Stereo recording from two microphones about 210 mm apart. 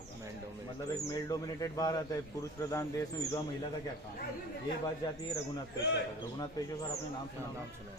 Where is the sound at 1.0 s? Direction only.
15° left (ahead or behind).